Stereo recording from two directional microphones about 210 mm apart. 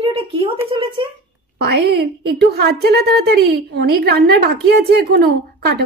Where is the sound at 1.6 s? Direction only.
55° right (ahead or behind).